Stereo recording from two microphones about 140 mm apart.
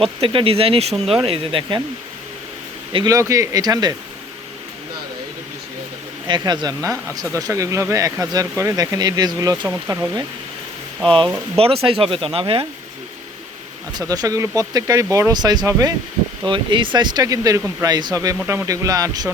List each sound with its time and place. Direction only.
0.0 s speech: 40° right (ahead or behind)
2.9 s speech: 25° right (ahead or behind)
6.2 s speech: 30° right (ahead or behind)
11.5 s speech: 45° right (ahead or behind)
14.0 s speech: 25° right (ahead or behind)